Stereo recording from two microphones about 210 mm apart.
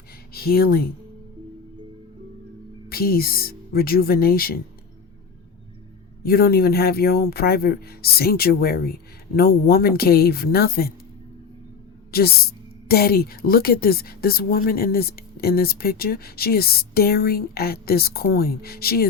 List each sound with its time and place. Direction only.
0.3 s a woman's voice: 45° left (ahead or behind)
2.9 s a woman's voice: 45° left (ahead or behind)
6.2 s a woman's voice: 45° left (ahead or behind)
12.1 s a woman's voice: 45° left (ahead or behind)